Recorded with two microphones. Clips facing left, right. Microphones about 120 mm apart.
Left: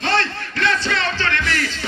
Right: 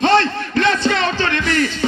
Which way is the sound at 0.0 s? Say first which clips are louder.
Right 7 dB; 20° right (ahead or behind).